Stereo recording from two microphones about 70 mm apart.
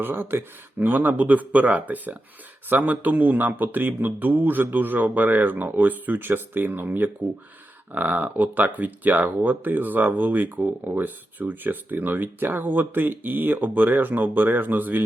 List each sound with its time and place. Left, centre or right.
0.0 s speech: right